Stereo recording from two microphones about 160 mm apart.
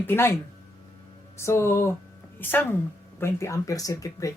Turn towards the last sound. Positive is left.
turn(degrees=20)  # may be behind; listen again after turning